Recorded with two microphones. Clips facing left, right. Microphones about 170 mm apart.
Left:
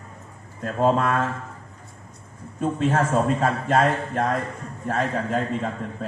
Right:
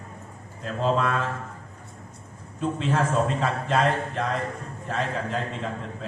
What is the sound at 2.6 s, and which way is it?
A man's voice, 50° left (ahead or behind).